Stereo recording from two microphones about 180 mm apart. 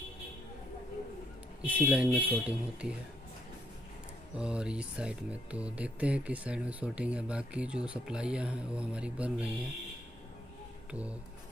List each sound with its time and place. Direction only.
1.8 s speech: 10° right (ahead or behind)
4.4 s speech: 5° right (ahead or behind)
10.9 s a sound: 5° right (ahead or behind)